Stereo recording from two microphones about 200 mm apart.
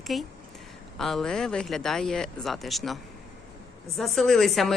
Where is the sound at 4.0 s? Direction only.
Centre (ahead or behind).